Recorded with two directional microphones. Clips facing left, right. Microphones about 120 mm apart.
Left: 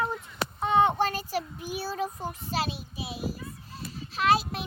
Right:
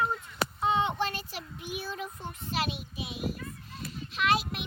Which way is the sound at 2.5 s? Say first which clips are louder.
Even; 35° left (ahead or behind).